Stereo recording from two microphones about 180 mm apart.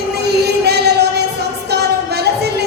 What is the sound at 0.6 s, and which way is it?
Music, 65° right (ahead or behind).